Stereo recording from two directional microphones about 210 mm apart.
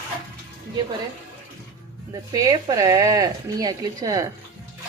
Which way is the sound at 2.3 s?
15° right (ahead or behind).